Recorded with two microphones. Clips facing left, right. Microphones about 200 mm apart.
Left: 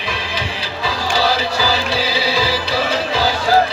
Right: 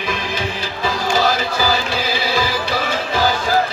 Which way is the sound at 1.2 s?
50° right (ahead or behind).